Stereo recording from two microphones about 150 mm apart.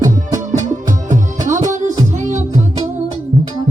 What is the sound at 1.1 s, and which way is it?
Music, 55° right (ahead or behind).